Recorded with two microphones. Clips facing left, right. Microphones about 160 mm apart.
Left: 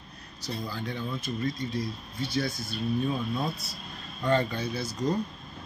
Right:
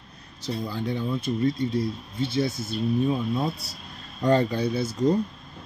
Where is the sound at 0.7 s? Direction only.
25° right (ahead or behind).